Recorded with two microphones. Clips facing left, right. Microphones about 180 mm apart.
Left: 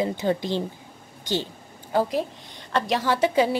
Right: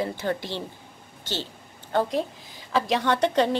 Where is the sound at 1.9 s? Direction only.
5° left (ahead or behind).